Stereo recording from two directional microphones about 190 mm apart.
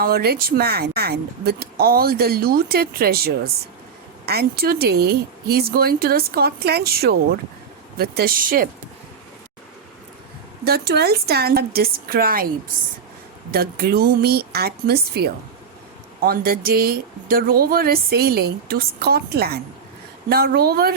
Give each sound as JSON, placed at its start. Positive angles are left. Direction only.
{"t": 0.0, "sound": "speech", "side_deg": -55}
{"t": 10.6, "sound": "speech", "side_deg": -55}
{"t": 13.5, "sound": "speech", "side_deg": -55}